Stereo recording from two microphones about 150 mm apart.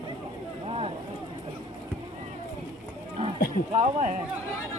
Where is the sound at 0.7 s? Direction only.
40° right (ahead or behind).